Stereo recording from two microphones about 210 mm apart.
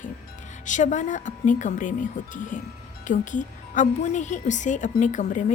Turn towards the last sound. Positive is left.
turn(degrees=35)  # may be behind; listen again after turning